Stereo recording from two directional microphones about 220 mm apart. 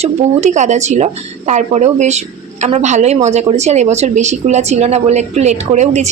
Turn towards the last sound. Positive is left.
turn(degrees=-30)  # may be behind; listen again after turning